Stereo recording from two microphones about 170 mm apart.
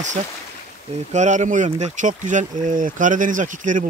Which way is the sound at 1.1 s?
45° right (ahead or behind).